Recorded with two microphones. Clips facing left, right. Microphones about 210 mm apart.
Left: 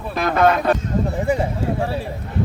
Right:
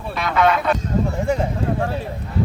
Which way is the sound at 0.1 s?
50° left (ahead or behind).